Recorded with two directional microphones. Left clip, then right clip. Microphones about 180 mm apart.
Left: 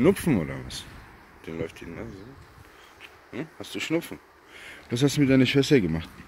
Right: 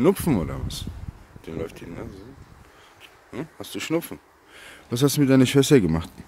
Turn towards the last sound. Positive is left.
turn(degrees=-35)  # may be behind; listen again after turning